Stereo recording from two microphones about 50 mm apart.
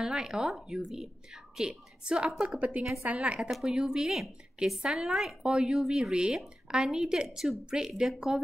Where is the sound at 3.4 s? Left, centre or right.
Centre.